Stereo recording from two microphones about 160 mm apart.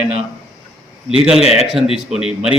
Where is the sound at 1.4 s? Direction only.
40° left (ahead or behind).